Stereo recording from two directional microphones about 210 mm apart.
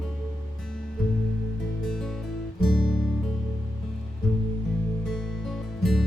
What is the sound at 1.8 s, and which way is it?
Music, centre (ahead or behind).